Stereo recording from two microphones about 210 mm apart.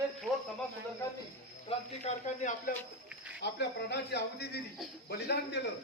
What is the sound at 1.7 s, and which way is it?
Speech, 35° left (ahead or behind).